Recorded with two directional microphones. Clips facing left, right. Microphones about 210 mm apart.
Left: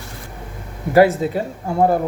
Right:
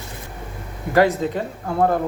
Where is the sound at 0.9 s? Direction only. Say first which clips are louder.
Left 4 dB; 10° left (ahead or behind).